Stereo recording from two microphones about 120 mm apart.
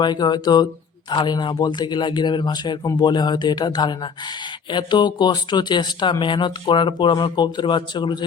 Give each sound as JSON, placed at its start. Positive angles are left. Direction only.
{"t": 0.0, "sound": "speech", "side_deg": 35}